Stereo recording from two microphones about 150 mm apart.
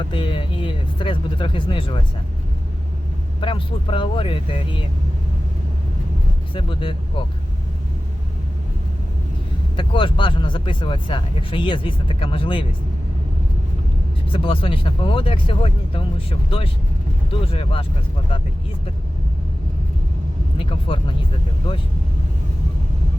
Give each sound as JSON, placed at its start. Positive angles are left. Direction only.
{"t": 0.0, "sound": "speech", "side_deg": 35}
{"t": 3.4, "sound": "speech", "side_deg": 35}
{"t": 6.5, "sound": "speech", "side_deg": 35}
{"t": 9.7, "sound": "speech", "side_deg": 35}
{"t": 14.3, "sound": "speech", "side_deg": 35}
{"t": 20.6, "sound": "speech", "side_deg": 35}